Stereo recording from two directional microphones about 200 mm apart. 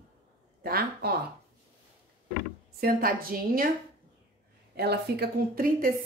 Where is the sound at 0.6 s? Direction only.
50° right (ahead or behind).